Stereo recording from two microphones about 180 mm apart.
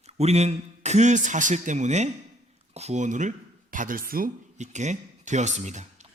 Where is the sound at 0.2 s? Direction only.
35° right (ahead or behind).